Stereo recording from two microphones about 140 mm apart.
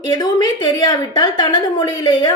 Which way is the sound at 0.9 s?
30° left (ahead or behind).